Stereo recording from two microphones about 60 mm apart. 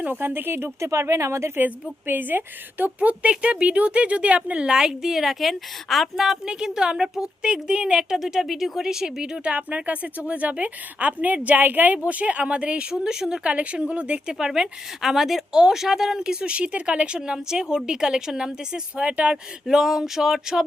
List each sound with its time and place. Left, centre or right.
0.0 s speech: right
1.6 s a woman's voice: right; by 13.5 s centre
13.5 s speech: right
14.3 s a woman's voice: centre
19.6 s a woman's voice: centre